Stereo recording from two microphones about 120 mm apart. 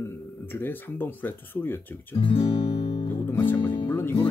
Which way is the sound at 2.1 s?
50° left (ahead or behind).